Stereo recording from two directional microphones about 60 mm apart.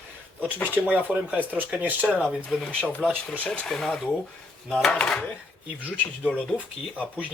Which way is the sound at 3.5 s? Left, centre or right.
Centre.